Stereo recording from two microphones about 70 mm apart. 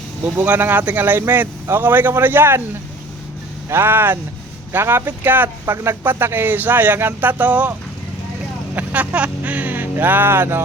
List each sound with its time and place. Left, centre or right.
0.4 s speech: right
3.7 s speech: right
5.7 s speech: right